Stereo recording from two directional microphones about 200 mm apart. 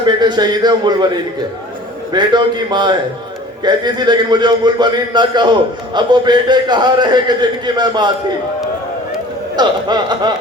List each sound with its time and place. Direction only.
0.0 s speech: 20° right (ahead or behind)
2.1 s speech: 20° right (ahead or behind)
9.6 s speech: 20° right (ahead or behind)